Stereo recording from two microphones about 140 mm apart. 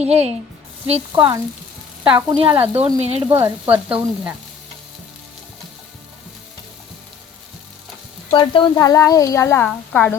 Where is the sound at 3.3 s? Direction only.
20° right (ahead or behind).